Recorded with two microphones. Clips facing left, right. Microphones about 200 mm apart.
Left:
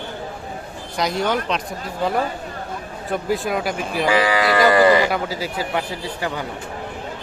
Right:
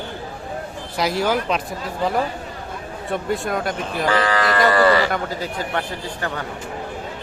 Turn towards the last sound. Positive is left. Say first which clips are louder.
# left 1 dB
turn(degrees=10)  # may be behind; listen again after turning